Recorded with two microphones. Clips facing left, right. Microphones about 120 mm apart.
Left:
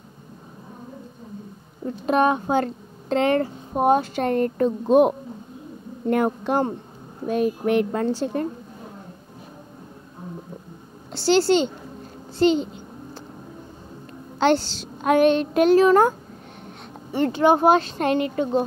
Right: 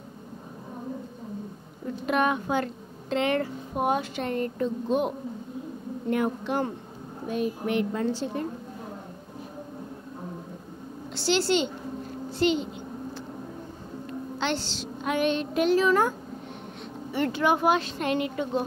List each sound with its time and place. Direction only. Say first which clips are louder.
2.0 s a woman's voice: left 5 dB; 30° left (ahead or behind); by 8.1 s 55° left (ahead or behind)
11.1 s speech: left 6 dB; 35° left (ahead or behind)
14.4 s a woman's voice: left 11 dB; 40° left (ahead or behind)
17.1 s speech: left 6 dB; 30° left (ahead or behind)